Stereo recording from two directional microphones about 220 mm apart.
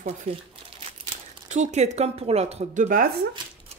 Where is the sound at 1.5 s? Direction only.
30° right (ahead or behind).